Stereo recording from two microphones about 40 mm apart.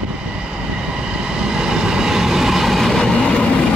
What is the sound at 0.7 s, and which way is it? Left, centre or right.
Train, right.